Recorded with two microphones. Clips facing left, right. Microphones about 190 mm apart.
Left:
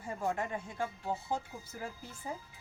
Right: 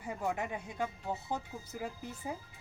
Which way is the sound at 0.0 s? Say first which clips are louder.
Left 1 dB; 15° right (ahead or behind).